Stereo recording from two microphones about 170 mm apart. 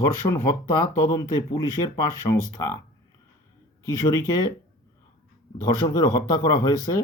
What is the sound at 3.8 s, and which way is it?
Speech, 20° left (ahead or behind).